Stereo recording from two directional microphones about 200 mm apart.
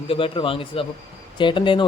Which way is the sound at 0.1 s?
25° left (ahead or behind).